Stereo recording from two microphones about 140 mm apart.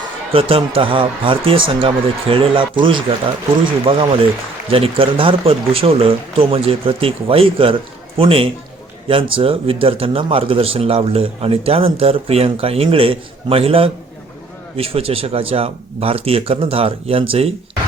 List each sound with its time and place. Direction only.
0.3 s a man's voice: 40° right (ahead or behind)